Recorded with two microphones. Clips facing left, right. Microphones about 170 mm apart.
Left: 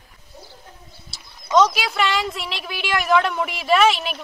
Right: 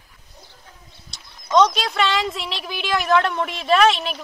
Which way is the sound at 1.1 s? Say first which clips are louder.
Even; 5° left (ahead or behind).